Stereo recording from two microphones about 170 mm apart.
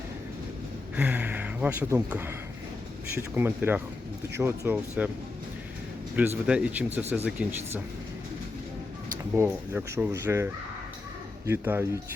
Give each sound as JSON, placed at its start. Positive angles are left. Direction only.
{"t": 0.9, "sound": "speech", "side_deg": -10}
{"t": 6.1, "sound": "speech", "side_deg": -10}
{"t": 9.3, "sound": "speech", "side_deg": -15}